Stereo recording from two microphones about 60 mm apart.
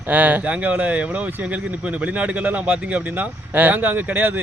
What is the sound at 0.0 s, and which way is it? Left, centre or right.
Speech, right.